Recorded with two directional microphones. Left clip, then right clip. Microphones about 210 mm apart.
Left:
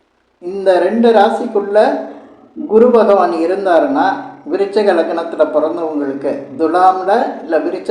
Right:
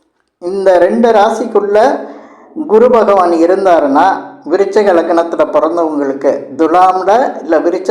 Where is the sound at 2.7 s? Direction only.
25° right (ahead or behind).